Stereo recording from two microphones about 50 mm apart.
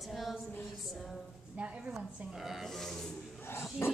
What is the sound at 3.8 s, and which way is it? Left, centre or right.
Dog, left.